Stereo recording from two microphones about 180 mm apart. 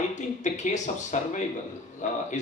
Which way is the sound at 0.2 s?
40° left (ahead or behind).